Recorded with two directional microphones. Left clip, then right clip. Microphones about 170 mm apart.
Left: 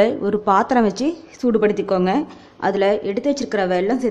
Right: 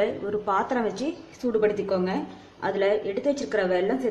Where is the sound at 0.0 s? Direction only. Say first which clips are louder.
Left 9 dB; 35° left (ahead or behind).